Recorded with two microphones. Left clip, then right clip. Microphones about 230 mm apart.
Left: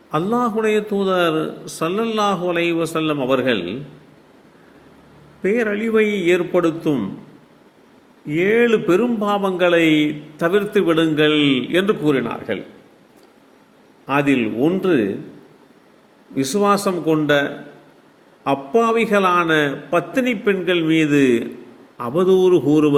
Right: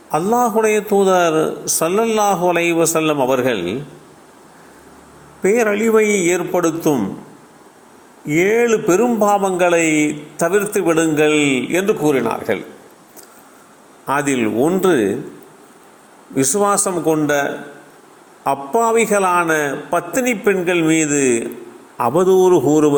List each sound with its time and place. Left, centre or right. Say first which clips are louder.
0.1 s speech: right 4 dB; centre
5.4 s speech: right 4 dB; centre
8.3 s speech: right 1 dB; centre
12.3 s a man's voice: right 5 dB; centre
14.1 s speech: right 1 dB; centre
16.3 s speech: right 1 dB; centre